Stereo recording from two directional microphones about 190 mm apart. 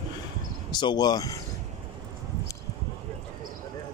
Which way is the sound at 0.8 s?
20° left (ahead or behind).